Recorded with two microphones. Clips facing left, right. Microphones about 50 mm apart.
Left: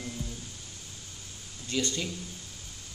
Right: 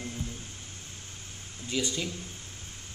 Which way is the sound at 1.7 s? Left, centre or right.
Centre.